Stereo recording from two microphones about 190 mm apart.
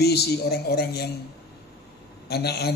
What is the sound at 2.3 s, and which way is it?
Speech, 60° left (ahead or behind).